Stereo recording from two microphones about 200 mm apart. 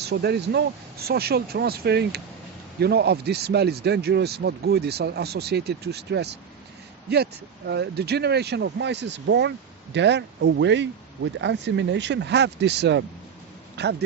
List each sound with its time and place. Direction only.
0.0 s a man's voice: 55° right (ahead or behind)
7.7 s a man's voice: 55° right (ahead or behind)